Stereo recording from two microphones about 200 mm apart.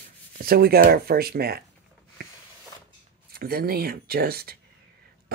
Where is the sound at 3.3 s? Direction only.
50° right (ahead or behind).